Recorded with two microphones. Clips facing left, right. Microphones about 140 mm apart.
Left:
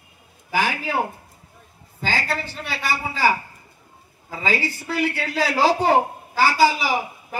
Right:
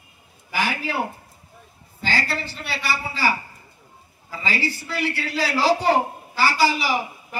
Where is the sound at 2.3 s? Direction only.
50° left (ahead or behind).